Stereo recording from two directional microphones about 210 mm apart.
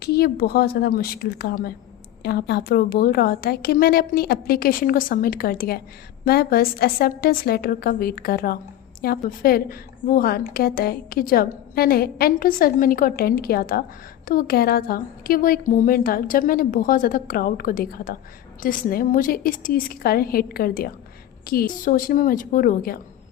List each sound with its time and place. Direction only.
0.0 s a woman's voice: 50° left (ahead or behind)